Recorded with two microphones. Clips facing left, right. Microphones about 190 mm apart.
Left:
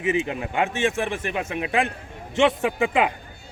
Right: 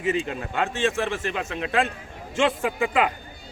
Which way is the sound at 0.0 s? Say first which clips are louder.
Left 2 dB; 20° left (ahead or behind).